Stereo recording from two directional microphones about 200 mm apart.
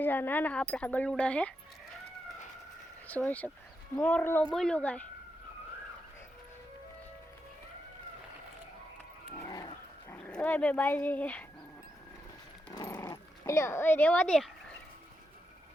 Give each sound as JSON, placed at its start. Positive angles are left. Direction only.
{"t": 0.0, "sound": "speech", "side_deg": 10}
{"t": 3.1, "sound": "speech", "side_deg": 5}
{"t": 9.5, "sound": "dog", "side_deg": 20}
{"t": 10.2, "sound": "speech", "side_deg": 5}
{"t": 12.7, "sound": "speech", "side_deg": 15}